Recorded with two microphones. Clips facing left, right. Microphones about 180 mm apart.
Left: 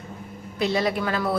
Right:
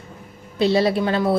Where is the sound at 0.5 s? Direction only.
30° right (ahead or behind).